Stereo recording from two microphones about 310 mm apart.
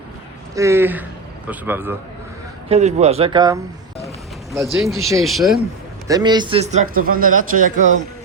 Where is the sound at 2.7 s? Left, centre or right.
Right.